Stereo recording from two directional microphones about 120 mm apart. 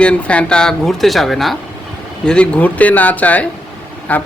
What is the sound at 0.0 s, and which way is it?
Speech, 10° left (ahead or behind).